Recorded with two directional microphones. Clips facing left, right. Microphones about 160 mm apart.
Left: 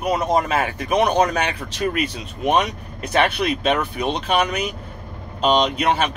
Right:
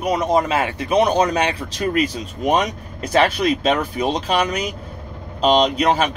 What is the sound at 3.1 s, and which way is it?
Speech, 35° right (ahead or behind).